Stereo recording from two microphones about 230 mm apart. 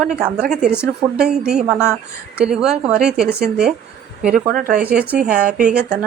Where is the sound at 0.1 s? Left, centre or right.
Centre.